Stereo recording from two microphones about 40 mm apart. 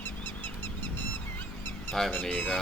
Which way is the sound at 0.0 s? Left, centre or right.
Left.